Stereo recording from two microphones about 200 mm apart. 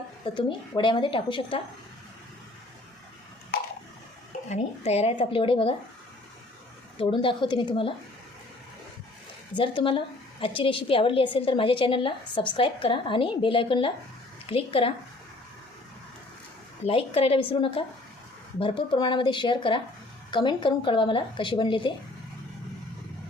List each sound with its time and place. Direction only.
0.3 s a woman's voice: 25° left (ahead or behind)
4.4 s a woman's voice: 35° left (ahead or behind)
7.0 s a woman's voice: 25° left (ahead or behind)
9.6 s a woman's voice: 25° left (ahead or behind)
16.8 s a woman's voice: 30° left (ahead or behind)